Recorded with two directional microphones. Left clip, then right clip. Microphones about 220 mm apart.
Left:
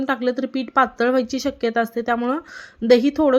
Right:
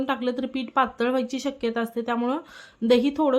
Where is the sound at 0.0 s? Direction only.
15° left (ahead or behind).